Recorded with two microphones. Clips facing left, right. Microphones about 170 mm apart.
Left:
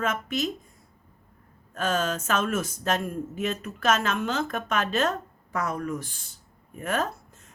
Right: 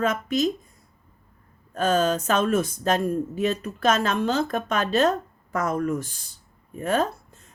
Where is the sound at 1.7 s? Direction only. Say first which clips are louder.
Right 5 dB; 35° right (ahead or behind).